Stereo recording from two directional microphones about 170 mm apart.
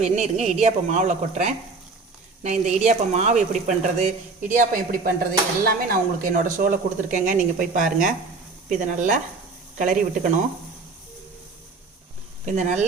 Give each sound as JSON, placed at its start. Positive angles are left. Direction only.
{"t": 0.0, "sound": "speech", "side_deg": -40}
{"t": 12.5, "sound": "speech", "side_deg": -45}